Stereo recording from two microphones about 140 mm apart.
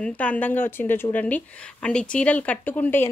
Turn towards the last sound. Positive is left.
turn(degrees=15)  # may be behind; listen again after turning